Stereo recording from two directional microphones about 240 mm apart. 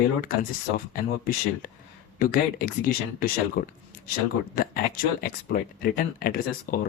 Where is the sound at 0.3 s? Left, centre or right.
Left.